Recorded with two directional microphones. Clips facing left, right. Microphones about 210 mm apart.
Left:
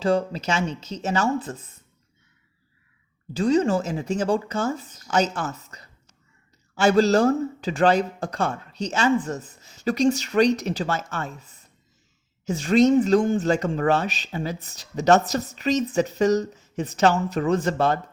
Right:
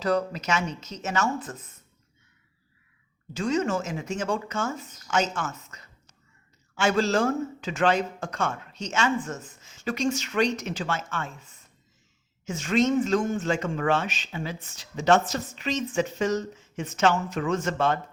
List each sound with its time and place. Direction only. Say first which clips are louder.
0.0 s speech: left 3 dB; 30° left (ahead or behind)
3.3 s speech: left 5 dB; 35° left (ahead or behind)